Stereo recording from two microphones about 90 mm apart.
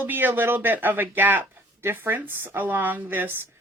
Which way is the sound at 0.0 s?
20° right (ahead or behind).